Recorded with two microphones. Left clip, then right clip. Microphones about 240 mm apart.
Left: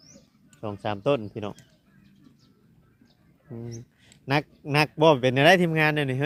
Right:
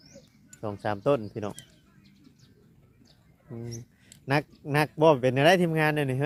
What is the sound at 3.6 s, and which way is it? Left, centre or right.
Speech, centre.